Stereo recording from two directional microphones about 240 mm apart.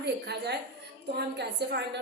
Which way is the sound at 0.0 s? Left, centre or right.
Right.